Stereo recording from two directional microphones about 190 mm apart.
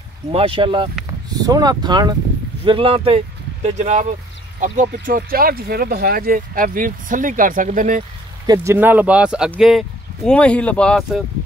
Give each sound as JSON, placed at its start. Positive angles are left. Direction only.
{"t": 0.3, "sound": "speech", "side_deg": -30}
{"t": 8.5, "sound": "speech", "side_deg": -10}